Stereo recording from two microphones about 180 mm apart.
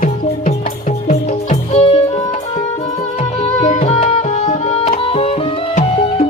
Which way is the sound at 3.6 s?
40° left (ahead or behind).